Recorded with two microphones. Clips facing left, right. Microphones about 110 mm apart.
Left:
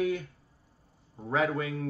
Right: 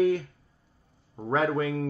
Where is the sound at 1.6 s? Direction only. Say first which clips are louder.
Right 5 dB; 45° right (ahead or behind).